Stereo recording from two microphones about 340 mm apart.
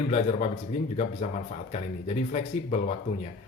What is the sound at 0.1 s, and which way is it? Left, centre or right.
Speech, centre.